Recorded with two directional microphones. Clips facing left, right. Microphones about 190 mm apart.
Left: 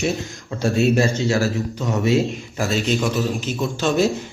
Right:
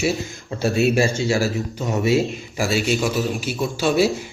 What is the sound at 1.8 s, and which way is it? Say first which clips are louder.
Speech: even; 15° right (ahead or behind).